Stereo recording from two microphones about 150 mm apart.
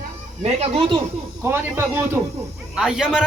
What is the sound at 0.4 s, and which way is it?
Speech, 45° right (ahead or behind).